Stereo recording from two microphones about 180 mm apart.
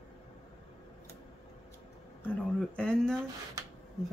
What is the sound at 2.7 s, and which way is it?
Speech, 5° left (ahead or behind).